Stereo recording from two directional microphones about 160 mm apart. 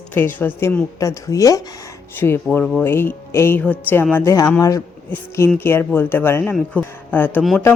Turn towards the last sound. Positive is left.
turn(degrees=10)  # may be behind; listen again after turning